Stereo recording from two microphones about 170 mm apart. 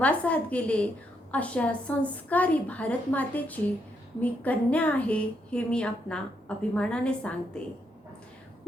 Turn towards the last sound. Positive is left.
turn(degrees=5)  # may be behind; listen again after turning